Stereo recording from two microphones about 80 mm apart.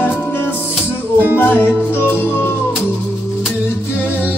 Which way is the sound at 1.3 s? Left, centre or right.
Left.